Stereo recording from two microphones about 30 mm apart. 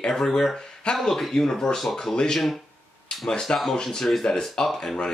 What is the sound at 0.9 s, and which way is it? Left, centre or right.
Speech, left.